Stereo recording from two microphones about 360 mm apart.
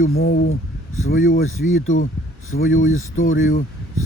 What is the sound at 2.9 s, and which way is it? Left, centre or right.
Speech, left.